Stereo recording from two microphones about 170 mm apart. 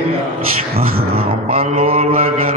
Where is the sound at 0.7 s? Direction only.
65° right (ahead or behind).